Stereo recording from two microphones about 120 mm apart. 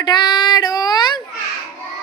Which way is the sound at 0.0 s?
40° left (ahead or behind).